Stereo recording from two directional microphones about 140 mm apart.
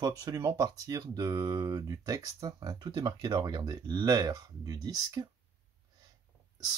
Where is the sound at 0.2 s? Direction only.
25° right (ahead or behind).